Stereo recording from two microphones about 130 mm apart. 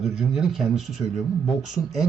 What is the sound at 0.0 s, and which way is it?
Speech, centre (ahead or behind).